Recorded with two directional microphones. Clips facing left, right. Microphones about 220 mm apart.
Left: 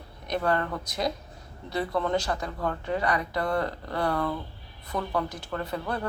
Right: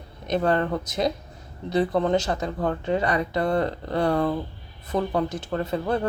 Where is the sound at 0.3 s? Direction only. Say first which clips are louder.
Right 5 dB; 25° right (ahead or behind).